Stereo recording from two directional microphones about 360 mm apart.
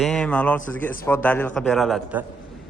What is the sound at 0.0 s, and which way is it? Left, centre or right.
A man's voice, centre.